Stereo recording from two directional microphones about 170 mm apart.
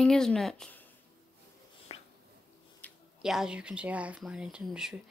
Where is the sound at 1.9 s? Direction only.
35° left (ahead or behind).